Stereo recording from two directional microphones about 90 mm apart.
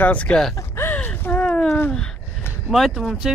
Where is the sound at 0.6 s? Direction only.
30° left (ahead or behind).